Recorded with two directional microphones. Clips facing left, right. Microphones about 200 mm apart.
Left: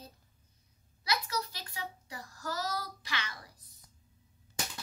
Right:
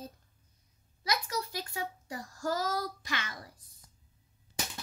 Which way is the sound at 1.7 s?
45° right (ahead or behind).